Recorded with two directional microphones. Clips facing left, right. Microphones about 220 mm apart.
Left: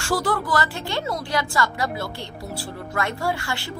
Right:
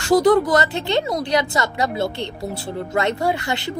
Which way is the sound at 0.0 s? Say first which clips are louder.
Right 10 dB; 20° right (ahead or behind).